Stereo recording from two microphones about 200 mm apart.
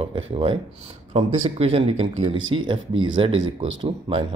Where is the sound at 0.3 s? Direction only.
25° right (ahead or behind).